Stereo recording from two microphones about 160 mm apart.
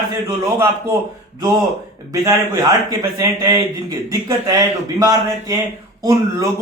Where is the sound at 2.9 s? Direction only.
20° right (ahead or behind).